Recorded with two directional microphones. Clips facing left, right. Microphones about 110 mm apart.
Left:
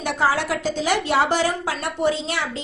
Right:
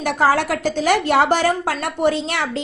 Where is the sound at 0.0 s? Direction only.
55° right (ahead or behind).